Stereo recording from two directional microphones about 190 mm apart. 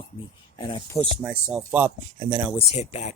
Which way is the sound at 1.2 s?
5° right (ahead or behind).